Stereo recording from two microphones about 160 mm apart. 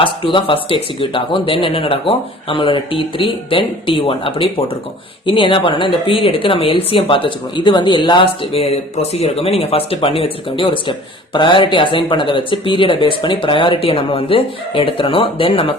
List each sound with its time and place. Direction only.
0.0 s a woman's voice: 35° left (ahead or behind)